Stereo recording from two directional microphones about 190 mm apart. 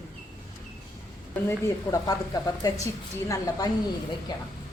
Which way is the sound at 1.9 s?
20° left (ahead or behind).